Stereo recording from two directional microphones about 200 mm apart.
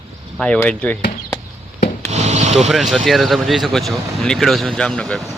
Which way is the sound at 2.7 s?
Centre (ahead or behind).